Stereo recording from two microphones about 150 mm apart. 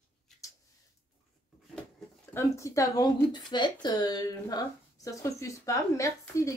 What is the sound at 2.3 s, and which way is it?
Speech, 20° left (ahead or behind).